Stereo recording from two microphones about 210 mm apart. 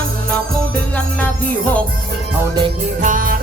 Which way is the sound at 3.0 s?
40° right (ahead or behind).